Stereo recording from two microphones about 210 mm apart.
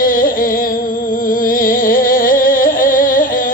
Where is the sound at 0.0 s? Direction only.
40° left (ahead or behind).